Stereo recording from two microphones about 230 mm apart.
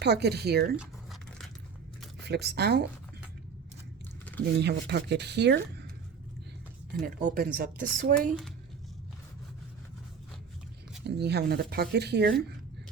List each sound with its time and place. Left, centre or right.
0.0 s speech: right
0.8 s crumpling: centre
2.2 s speech: right
4.6 s speech: right
7.2 s speech: right
11.0 s speech: right